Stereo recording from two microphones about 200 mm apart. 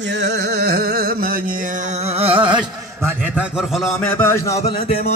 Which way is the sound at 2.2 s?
25° right (ahead or behind).